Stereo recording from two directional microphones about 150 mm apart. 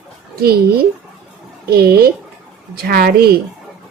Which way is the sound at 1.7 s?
90° right.